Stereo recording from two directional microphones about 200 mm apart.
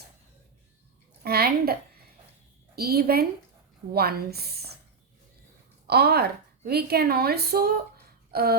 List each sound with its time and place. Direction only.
1.2 s a child's voice: 50° right (ahead or behind)
2.7 s a woman's voice: 50° right (ahead or behind)
5.9 s a woman's voice: 55° right (ahead or behind)
8.3 s a sound: 50° right (ahead or behind)